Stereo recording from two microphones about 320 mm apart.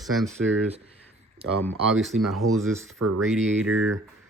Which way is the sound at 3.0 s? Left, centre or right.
Right.